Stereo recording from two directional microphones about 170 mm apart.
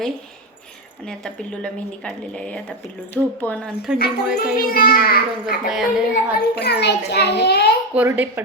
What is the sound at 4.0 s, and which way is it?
A child's voice, 60° left (ahead or behind).